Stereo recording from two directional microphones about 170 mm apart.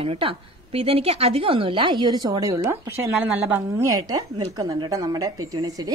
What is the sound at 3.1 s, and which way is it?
A woman's voice, 5° right (ahead or behind).